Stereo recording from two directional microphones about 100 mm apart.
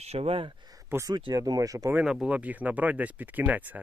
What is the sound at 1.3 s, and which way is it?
Speech, 40° right (ahead or behind).